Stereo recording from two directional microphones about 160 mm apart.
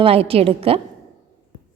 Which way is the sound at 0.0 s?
35° right (ahead or behind).